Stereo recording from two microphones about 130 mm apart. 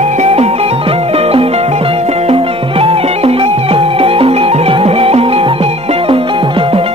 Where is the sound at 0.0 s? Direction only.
60° right (ahead or behind).